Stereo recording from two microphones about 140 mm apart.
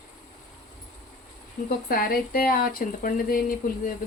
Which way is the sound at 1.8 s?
90° left.